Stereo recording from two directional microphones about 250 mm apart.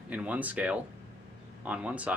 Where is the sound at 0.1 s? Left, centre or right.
Centre.